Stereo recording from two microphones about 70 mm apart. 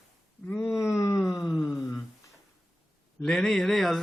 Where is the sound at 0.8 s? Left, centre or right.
Left.